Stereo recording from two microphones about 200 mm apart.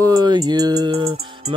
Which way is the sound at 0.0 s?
20° right (ahead or behind).